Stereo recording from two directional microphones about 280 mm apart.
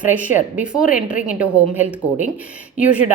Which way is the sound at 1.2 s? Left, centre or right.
Centre.